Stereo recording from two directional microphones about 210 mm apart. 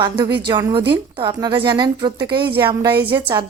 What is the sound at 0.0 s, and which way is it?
A woman's voice, 20° right (ahead or behind).